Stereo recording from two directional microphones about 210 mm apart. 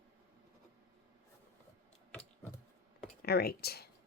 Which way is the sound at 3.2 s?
50° left (ahead or behind).